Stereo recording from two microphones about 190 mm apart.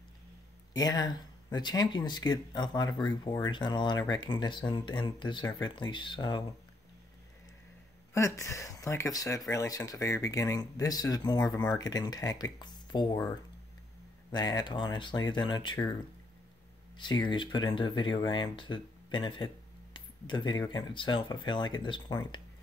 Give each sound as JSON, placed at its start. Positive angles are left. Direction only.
{"t": 0.7, "sound": "speech", "side_deg": 20}
{"t": 8.1, "sound": "speech", "side_deg": 15}